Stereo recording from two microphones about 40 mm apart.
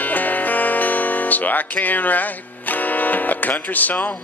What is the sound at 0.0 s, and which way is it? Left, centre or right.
Music, left.